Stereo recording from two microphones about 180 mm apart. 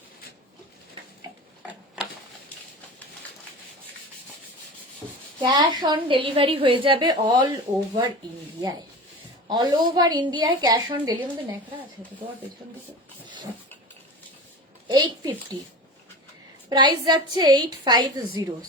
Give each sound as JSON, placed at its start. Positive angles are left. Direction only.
{"t": 5.4, "sound": "a woman's voice", "side_deg": -25}
{"t": 9.5, "sound": "a woman's voice", "side_deg": -25}
{"t": 13.2, "sound": "a sound", "side_deg": -25}
{"t": 14.8, "sound": "a child's voice", "side_deg": -25}
{"t": 16.6, "sound": "a woman's voice", "side_deg": -25}